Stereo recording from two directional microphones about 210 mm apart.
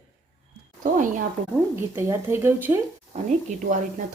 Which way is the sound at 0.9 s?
40° right (ahead or behind).